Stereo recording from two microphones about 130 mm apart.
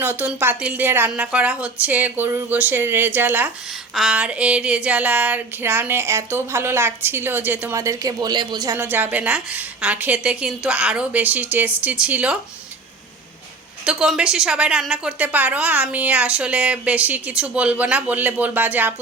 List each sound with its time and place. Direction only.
0.0 s a woman's voice: 15° right (ahead or behind)
7.8 s speech: 25° right (ahead or behind)
8.7 s a woman's voice: 15° right (ahead or behind)
13.8 s a woman's voice: 5° right (ahead or behind)